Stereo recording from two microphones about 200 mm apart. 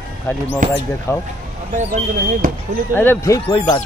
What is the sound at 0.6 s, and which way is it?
Speech, 40° right (ahead or behind).